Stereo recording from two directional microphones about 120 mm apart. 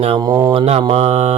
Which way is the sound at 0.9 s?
65° right (ahead or behind).